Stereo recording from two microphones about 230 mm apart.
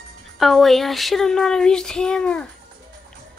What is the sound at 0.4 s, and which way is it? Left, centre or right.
Child singing, centre.